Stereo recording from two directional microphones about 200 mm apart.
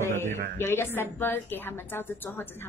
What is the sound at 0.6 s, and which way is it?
A woman's voice, 10° left (ahead or behind).